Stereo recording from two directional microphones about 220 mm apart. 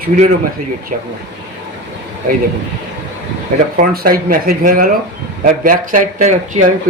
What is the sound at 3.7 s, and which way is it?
Speech, 40° right (ahead or behind).